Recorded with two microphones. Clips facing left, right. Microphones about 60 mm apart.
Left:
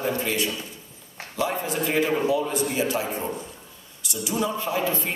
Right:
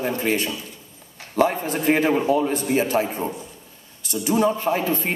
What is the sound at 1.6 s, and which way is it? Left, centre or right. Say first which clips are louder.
A man's voice: right 4 dB; right.